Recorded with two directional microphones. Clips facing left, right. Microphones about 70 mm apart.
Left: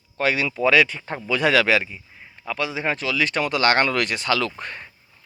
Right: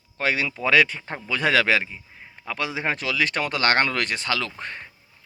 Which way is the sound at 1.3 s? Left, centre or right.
Right.